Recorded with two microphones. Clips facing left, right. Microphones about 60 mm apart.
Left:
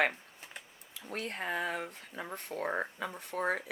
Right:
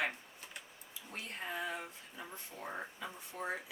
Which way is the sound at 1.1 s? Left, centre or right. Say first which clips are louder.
Left 7 dB; left.